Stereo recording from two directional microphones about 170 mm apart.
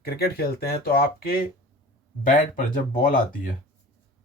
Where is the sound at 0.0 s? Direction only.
65° left (ahead or behind).